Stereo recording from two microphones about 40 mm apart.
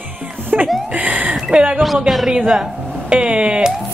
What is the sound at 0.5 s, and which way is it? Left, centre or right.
Speech, right.